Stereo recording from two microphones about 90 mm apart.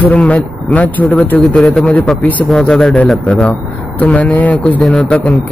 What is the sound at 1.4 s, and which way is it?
A man's voice, 5° left (ahead or behind).